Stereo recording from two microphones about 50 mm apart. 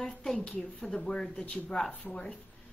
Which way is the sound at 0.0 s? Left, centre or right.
Centre.